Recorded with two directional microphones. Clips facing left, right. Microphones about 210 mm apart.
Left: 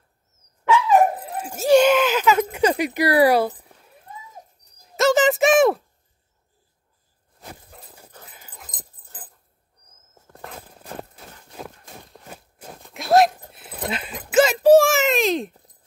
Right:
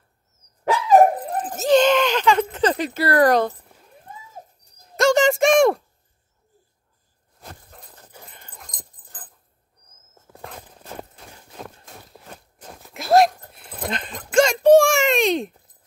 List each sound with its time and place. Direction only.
0.7 s dog: 40° right (ahead or behind)
1.4 s a sound: 10° left (ahead or behind)
2.5 s speech: 10° left (ahead or behind)
4.9 s a sound: centre (ahead or behind)
7.3 s dog: 5° left (ahead or behind)
10.2 s horse: centre (ahead or behind)
12.7 s dog: centre (ahead or behind)
13.5 s baby cry: 5° left (ahead or behind)